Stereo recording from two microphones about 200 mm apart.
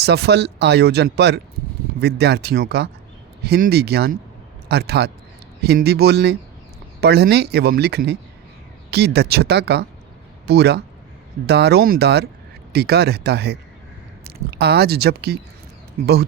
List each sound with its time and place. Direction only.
0.0 s speech: 55° right (ahead or behind)